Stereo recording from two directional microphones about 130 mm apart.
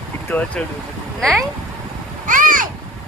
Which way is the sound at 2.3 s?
90° right.